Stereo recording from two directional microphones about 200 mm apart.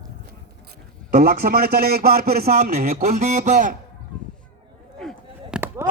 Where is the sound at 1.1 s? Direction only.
45° right (ahead or behind).